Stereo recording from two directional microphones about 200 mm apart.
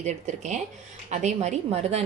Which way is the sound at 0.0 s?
35° right (ahead or behind).